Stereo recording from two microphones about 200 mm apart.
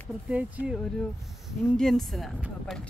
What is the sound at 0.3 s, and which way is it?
Speech, 5° right (ahead or behind).